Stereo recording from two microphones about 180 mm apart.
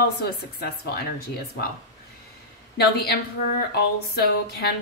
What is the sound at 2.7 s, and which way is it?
A woman's voice, 60° left (ahead or behind).